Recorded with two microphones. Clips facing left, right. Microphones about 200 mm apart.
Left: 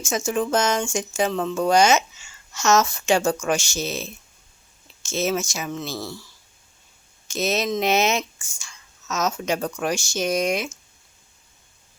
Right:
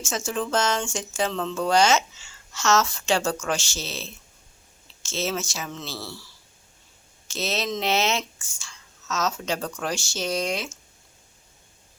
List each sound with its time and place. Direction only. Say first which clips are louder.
0.3 s speech: left 3 dB; 15° left (ahead or behind)
7.3 s speech: left 5 dB; 15° left (ahead or behind)